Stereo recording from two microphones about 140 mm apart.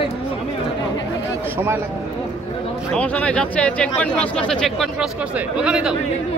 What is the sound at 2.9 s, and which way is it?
Speech, 10° left (ahead or behind).